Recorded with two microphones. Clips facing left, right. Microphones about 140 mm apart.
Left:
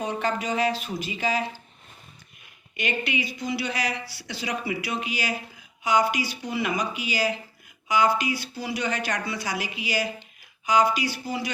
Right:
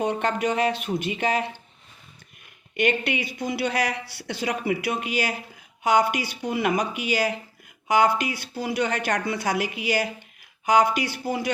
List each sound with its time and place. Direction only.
0.0 s speech: 60° right (ahead or behind)
2.7 s speech: 60° right (ahead or behind)